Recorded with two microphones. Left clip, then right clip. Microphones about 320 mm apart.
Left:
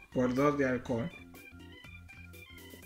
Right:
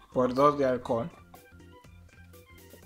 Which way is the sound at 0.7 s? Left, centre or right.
Right.